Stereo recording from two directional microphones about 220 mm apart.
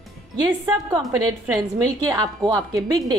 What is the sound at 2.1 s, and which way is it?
Speech, 15° right (ahead or behind).